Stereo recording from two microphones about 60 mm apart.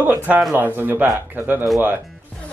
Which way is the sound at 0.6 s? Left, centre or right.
Right.